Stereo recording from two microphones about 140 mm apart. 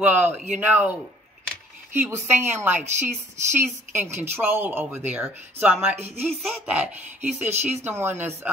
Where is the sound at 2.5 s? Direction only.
15° right (ahead or behind).